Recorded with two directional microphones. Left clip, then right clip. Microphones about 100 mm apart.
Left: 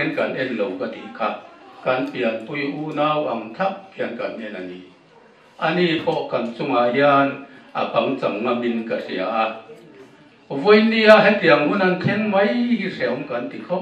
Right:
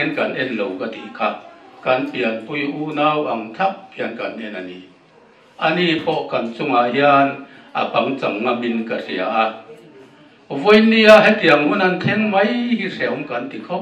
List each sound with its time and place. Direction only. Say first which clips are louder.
0.2 s a man's voice: right 1 dB; 25° right (ahead or behind)
5.6 s a man's voice: right 2 dB; 30° right (ahead or behind)
10.5 s a man's voice: right 2 dB; 25° right (ahead or behind)